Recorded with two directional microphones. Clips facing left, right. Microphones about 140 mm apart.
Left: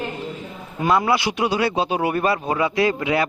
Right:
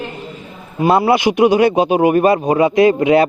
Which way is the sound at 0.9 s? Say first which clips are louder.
Right 6 dB; 30° right (ahead or behind).